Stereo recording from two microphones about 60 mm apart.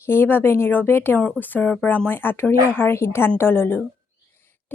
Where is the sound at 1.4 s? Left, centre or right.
Left.